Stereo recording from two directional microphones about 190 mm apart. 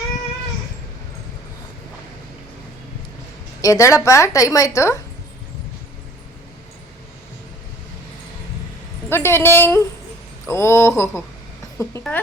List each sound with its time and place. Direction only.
3.6 s a woman's voice: 15° left (ahead or behind)
9.0 s a woman's voice: 10° left (ahead or behind)